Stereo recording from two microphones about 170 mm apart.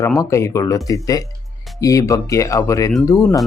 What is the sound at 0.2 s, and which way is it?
Speech, 15° left (ahead or behind).